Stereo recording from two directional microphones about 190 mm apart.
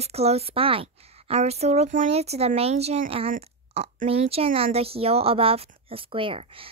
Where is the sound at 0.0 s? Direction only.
35° right (ahead or behind).